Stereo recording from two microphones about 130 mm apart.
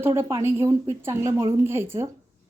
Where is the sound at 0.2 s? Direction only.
20° right (ahead or behind).